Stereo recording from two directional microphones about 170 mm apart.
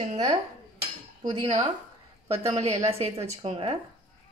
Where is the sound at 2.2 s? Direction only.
40° right (ahead or behind).